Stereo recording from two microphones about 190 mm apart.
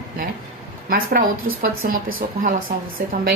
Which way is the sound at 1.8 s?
50° right (ahead or behind).